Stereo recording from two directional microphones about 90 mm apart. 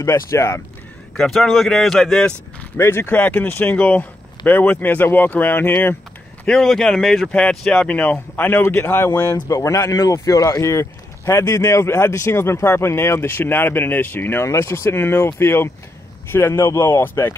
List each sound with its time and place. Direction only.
0.0 s speech: 35° left (ahead or behind)
1.1 s speech: 5° left (ahead or behind)
2.8 s speech: 25° left (ahead or behind)
6.4 s speech: 5° left (ahead or behind); by 17.4 s 25° left (ahead or behind)